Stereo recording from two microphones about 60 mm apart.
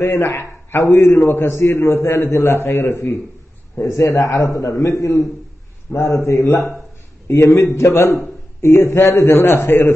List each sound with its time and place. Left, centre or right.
0.0 s a man's voice: left
3.7 s a man's voice: left